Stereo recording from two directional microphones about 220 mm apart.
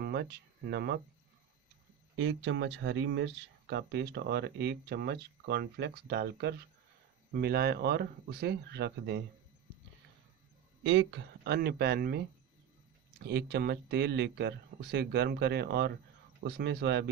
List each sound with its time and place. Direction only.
0.0 s speech: 45° right (ahead or behind)
2.1 s speech: 60° right (ahead or behind)
10.8 s speech: 60° right (ahead or behind)
13.2 s speech: 50° right (ahead or behind)